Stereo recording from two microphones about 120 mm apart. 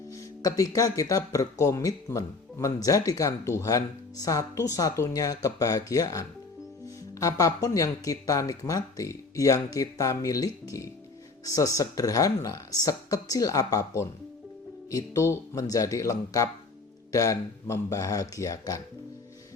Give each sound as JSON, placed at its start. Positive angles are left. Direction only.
{"t": 0.1, "sound": "speech", "side_deg": 25}